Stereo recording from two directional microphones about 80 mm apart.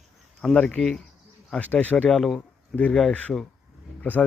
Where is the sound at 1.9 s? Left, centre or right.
Centre.